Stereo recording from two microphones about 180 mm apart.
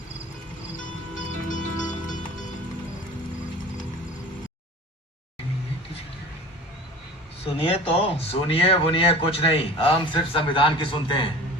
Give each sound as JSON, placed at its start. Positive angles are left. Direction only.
{"t": 1.2, "sound": "music", "side_deg": 45}
{"t": 7.4, "sound": "speech", "side_deg": 30}